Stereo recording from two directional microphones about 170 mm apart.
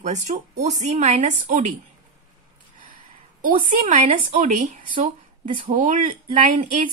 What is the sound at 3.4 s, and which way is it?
A woman's voice, 50° right (ahead or behind).